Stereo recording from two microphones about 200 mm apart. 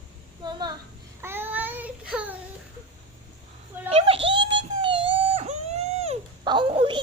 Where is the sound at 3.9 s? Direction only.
30° right (ahead or behind).